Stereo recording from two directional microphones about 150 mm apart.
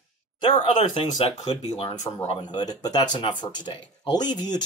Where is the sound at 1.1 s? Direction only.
45° left (ahead or behind).